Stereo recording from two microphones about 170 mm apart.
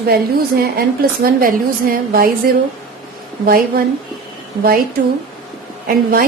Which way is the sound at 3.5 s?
60° right (ahead or behind).